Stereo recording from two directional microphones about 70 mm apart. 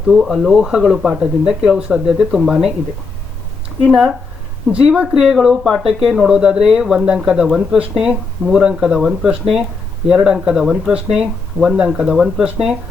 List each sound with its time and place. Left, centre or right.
0.2 s speech: centre
4.7 s speech: centre